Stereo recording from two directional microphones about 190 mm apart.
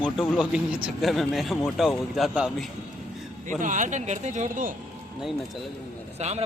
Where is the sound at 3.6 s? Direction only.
40° right (ahead or behind).